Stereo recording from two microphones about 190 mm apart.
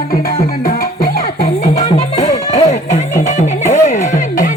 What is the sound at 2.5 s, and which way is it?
Music, 40° left (ahead or behind).